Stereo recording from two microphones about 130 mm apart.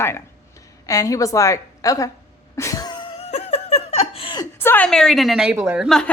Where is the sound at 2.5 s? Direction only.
25° left (ahead or behind).